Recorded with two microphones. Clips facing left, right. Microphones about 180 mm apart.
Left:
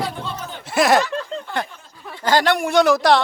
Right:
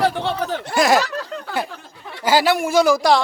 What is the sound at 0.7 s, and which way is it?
Speech, centre (ahead or behind).